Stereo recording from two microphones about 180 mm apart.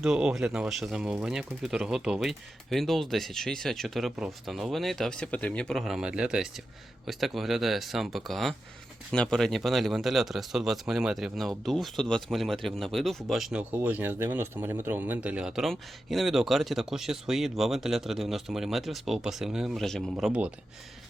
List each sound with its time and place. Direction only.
0.0 s speech: 5° right (ahead or behind)